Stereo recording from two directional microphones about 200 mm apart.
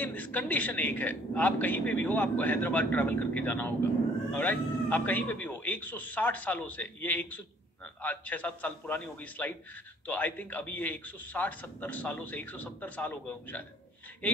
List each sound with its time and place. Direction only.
0.0 s a man's voice: 10° left (ahead or behind)